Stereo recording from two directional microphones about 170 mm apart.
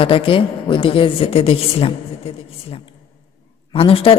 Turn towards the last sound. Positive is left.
turn(degrees=35)  # may be behind; listen again after turning